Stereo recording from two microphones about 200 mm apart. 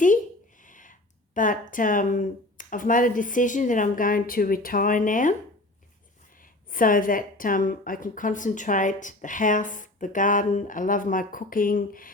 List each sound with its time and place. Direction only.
0.6 s speech: 40° left (ahead or behind)
6.4 s a woman's voice: 45° left (ahead or behind)